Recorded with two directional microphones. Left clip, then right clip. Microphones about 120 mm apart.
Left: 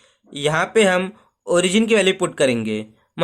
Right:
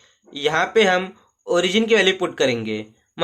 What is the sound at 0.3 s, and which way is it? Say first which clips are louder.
Speech: even; 65° left (ahead or behind).